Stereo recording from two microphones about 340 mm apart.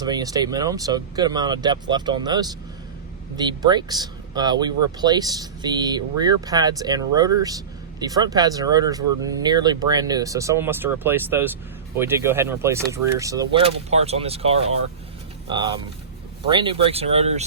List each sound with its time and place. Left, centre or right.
0.0 s speech: centre